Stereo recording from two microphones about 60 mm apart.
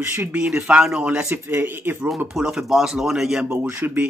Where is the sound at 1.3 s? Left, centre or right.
Right.